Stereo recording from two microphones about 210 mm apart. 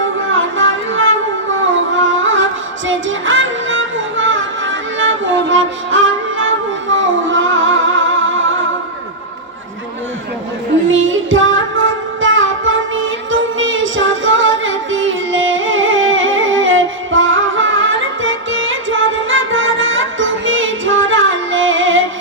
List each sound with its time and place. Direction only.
0.3 s music: 65° right (ahead or behind)
10.8 s music: 65° right (ahead or behind)